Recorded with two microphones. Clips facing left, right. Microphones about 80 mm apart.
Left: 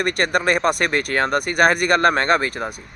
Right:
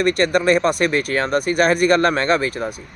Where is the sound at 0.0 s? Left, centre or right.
Left.